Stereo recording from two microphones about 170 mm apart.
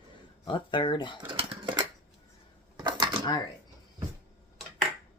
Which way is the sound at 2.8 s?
25° right (ahead or behind).